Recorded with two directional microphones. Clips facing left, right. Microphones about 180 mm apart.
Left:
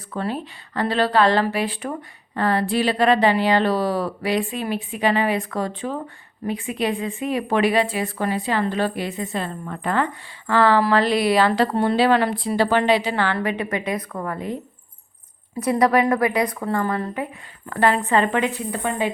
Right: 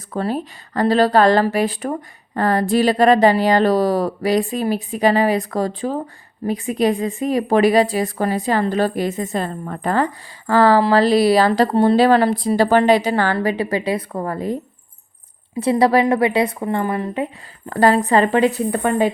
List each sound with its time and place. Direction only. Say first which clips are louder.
0.1 s speech: right 4 dB; 40° right (ahead or behind)
15.6 s a woman's voice: right 3 dB; 30° right (ahead or behind)
17.7 s speech: right 4 dB; 35° right (ahead or behind)
18.7 s a woman's voice: right 6 dB; 50° right (ahead or behind)